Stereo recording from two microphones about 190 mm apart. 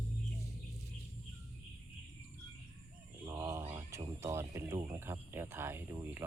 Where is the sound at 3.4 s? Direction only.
15° right (ahead or behind).